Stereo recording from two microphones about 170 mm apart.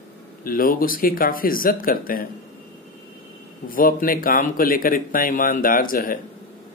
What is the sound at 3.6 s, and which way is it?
Speech, 55° left (ahead or behind).